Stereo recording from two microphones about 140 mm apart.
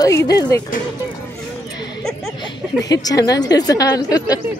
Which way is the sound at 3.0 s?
25° left (ahead or behind).